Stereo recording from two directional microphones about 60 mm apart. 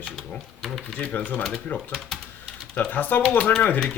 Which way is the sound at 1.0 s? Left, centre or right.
Left.